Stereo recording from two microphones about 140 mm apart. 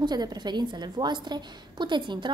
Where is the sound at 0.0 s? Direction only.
30° right (ahead or behind).